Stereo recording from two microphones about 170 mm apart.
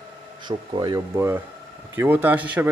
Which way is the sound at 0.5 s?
25° right (ahead or behind).